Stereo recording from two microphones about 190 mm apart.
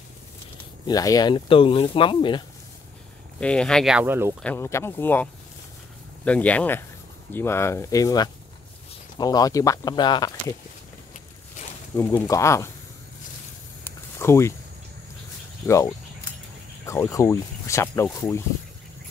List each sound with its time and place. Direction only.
0.8 s speech: 20° left (ahead or behind)
3.3 s speech: 5° left (ahead or behind); by 4.4 s 10° right (ahead or behind)
4.4 s speech: 10° left (ahead or behind)
12.0 s speech: 15° left (ahead or behind)
13.8 s a sound: 15° left (ahead or behind)
15.6 s speech: 15° left (ahead or behind)